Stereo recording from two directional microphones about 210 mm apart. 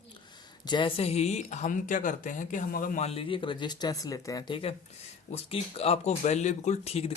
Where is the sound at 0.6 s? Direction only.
20° left (ahead or behind).